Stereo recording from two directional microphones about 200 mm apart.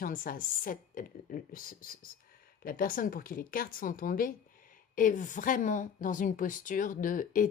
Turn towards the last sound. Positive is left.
turn(degrees=40)  # may be behind; listen again after turning